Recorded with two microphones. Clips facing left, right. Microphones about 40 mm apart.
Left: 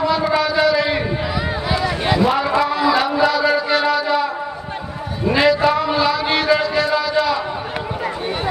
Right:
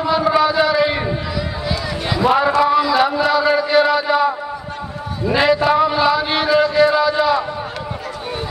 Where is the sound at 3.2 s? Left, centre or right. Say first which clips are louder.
Right 1 dB; centre.